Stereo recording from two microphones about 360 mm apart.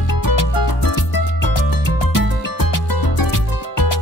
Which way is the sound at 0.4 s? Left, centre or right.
Left.